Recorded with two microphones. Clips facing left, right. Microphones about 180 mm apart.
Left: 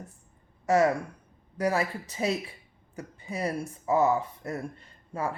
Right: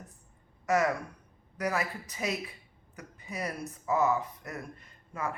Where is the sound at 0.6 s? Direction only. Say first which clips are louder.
Left 4 dB; 30° left (ahead or behind).